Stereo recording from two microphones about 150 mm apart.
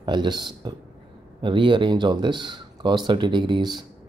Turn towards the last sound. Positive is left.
turn(degrees=-30)  # may be behind; listen again after turning